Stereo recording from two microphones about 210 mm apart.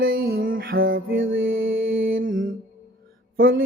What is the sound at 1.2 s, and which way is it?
Music, 65° right (ahead or behind).